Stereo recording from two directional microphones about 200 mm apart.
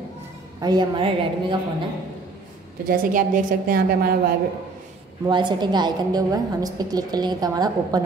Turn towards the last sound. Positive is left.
turn(degrees=-20)  # may be behind; listen again after turning